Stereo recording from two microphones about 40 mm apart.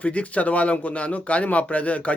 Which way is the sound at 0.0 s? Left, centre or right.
Left.